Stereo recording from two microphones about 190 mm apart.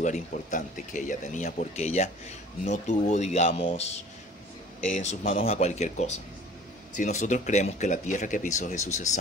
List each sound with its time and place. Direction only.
0.0 s speech: 40° left (ahead or behind)